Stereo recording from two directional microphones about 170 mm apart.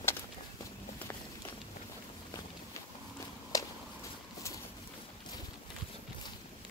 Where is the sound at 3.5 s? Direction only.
20° left (ahead or behind).